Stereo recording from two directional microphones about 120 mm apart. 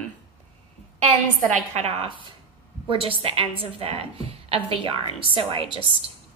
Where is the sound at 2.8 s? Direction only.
50° right (ahead or behind).